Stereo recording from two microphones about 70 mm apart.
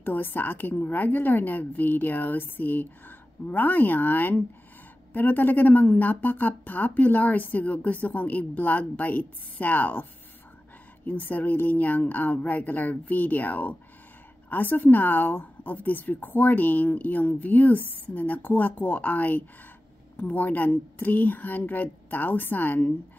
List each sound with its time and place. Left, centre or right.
0.0 s speech: left
11.1 s speech: left